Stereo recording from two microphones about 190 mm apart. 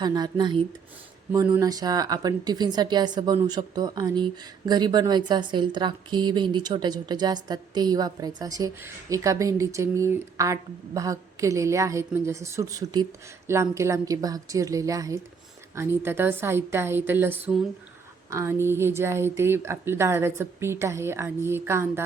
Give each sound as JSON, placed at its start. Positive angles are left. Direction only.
{"t": 0.0, "sound": "speech", "side_deg": -20}